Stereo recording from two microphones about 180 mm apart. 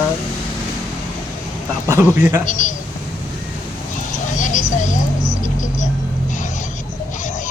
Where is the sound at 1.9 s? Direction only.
15° right (ahead or behind).